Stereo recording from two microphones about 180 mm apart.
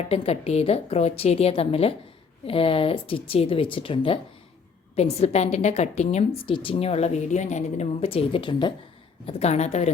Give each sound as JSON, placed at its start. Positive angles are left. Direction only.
{"t": 0.1, "sound": "a woman's voice", "side_deg": 35}
{"t": 9.2, "sound": "a woman's voice", "side_deg": 35}